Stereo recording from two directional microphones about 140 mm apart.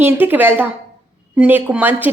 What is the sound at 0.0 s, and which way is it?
A woman's voice, 15° right (ahead or behind).